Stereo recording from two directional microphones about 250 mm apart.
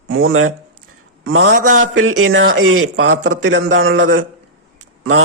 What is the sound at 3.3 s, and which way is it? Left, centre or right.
Speech, right.